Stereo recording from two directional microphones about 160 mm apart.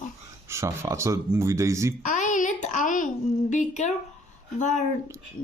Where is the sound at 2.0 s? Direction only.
50° left (ahead or behind).